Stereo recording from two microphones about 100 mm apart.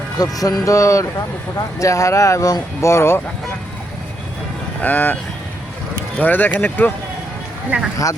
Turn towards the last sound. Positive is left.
turn(degrees=-15)  # may be behind; listen again after turning